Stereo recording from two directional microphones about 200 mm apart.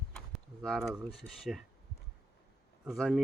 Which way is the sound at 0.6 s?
Centre (ahead or behind).